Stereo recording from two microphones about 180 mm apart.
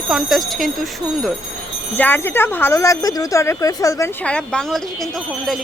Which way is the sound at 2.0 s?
10° left (ahead or behind).